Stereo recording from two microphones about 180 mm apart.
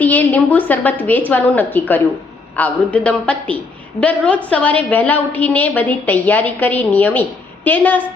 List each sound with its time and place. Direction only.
0.0 s a woman's voice: 10° left (ahead or behind)